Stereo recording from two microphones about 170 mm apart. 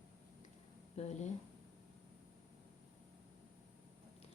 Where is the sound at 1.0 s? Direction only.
40° left (ahead or behind).